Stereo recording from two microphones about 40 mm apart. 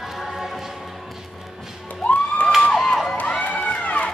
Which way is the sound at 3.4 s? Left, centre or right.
Left.